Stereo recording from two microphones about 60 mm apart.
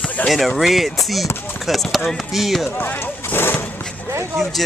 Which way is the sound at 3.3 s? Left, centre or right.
Left.